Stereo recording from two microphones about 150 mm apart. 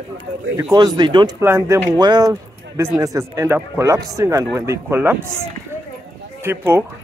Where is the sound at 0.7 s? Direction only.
30° right (ahead or behind).